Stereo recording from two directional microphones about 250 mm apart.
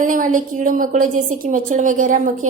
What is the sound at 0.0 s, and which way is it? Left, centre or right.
A woman's voice, right.